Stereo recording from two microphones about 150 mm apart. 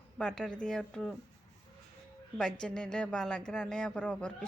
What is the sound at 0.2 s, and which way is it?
Speech, 5° left (ahead or behind).